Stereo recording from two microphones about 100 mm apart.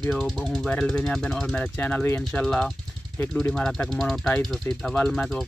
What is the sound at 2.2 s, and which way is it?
Speech, 5° left (ahead or behind).